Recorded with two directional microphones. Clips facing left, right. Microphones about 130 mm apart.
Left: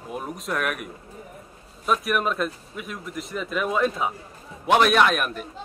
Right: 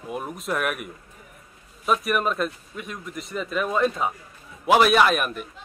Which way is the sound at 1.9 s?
Centre (ahead or behind).